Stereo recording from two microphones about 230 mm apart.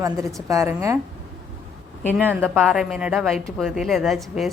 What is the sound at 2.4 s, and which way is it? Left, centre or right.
A woman's voice, centre.